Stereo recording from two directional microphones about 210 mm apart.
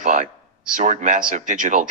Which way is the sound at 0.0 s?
40° right (ahead or behind).